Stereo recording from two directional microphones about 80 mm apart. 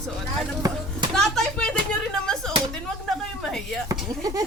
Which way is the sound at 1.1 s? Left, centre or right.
Centre.